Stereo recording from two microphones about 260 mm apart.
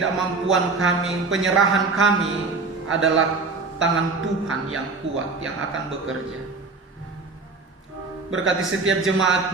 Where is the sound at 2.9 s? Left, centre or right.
Right.